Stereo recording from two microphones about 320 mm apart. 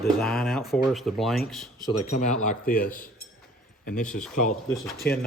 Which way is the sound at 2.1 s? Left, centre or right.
Left.